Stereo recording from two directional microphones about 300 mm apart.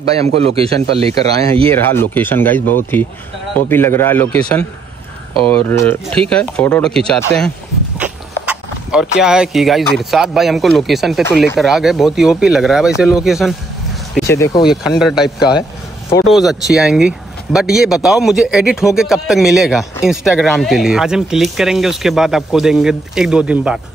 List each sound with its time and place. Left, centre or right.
0.6 s a man's voice: centre
1.7 s speech: centre
8.0 s a sound: centre
9.2 s speech: centre
14.6 s speech: centre